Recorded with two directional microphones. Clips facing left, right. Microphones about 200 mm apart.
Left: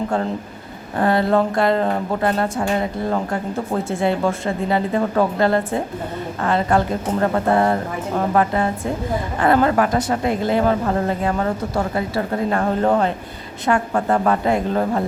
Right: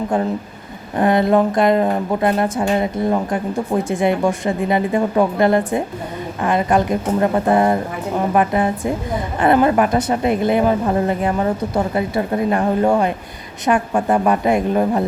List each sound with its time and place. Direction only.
0.9 s a woman's voice: 20° right (ahead or behind)